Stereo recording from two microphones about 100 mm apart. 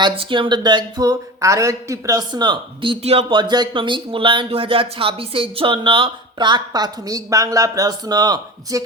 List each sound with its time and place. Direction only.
0.0 s speech: 55° right (ahead or behind); by 2.2 s 35° right (ahead or behind)
2.3 s speech: 50° right (ahead or behind)
3.0 s speech: 90° right
3.2 s speech: 50° right (ahead or behind)